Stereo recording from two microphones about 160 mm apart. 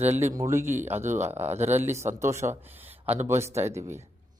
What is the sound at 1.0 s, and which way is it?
Speech, 50° right (ahead or behind).